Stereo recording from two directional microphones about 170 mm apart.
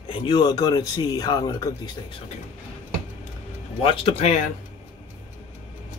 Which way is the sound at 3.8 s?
35° left (ahead or behind).